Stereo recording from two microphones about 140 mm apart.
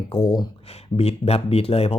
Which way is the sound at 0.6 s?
45° left (ahead or behind).